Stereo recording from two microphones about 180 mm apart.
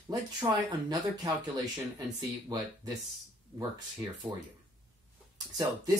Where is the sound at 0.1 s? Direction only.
25° right (ahead or behind).